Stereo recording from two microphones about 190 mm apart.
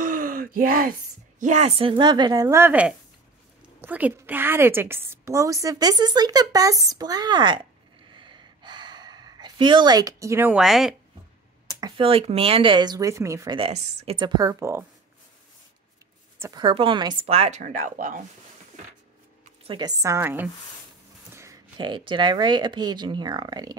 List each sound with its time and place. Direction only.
0.0 s groan: 45° right (ahead or behind)
1.4 s speech: 35° right (ahead or behind)
2.4 s a woman's voice: 10° right (ahead or behind)
8.1 s gasp: 25° right (ahead or behind); by 11.0 s centre (ahead or behind)
11.8 s speech: 30° right (ahead or behind)
13.6 s a woman's voice: 35° right (ahead or behind)
14.1 s speech: 25° right (ahead or behind)
16.3 s a woman's voice: 15° right (ahead or behind)
16.6 s a woman's voice: 25° right (ahead or behind); by 18.2 s 45° right (ahead or behind)
19.6 s a woman's voice: 25° right (ahead or behind)